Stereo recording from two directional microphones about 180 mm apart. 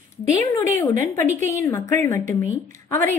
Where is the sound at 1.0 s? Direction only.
15° left (ahead or behind).